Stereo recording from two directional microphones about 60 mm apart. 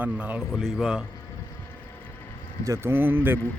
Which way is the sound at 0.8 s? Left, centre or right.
Centre.